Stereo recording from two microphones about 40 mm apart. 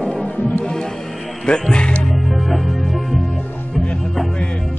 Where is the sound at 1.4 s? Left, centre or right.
Left.